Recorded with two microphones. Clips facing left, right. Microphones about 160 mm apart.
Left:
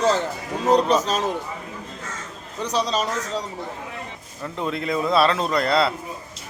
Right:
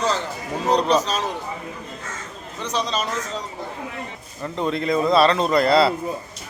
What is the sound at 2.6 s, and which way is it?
Speech, 35° left (ahead or behind).